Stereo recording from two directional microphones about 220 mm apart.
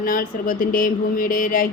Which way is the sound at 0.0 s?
40° left (ahead or behind).